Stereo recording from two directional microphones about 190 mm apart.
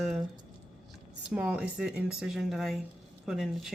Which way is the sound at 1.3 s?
5° right (ahead or behind).